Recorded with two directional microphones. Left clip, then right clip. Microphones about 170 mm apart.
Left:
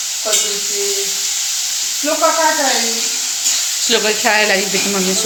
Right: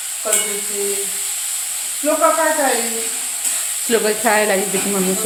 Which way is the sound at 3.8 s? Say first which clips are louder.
Left 1 dB; 20° right (ahead or behind).